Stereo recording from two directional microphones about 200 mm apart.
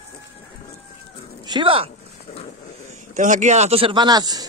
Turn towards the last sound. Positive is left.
turn(degrees=-20)  # may be behind; listen again after turning